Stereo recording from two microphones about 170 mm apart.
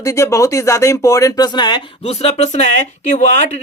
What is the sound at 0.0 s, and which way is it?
Speech, 20° left (ahead or behind).